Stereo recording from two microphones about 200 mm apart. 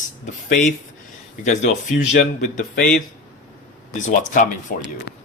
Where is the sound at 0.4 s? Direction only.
35° left (ahead or behind).